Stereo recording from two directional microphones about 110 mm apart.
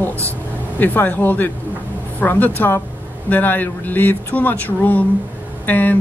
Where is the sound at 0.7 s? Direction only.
15° left (ahead or behind).